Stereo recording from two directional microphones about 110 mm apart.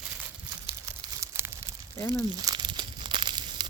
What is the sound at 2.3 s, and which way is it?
Crumpling, 40° right (ahead or behind).